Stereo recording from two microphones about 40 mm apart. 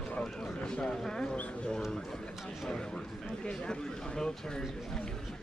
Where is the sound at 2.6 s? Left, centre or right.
Centre.